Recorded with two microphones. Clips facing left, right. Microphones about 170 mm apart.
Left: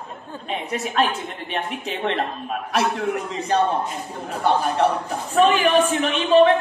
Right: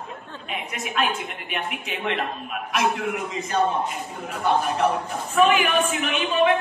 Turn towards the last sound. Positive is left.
turn(degrees=35)  # may be behind; listen again after turning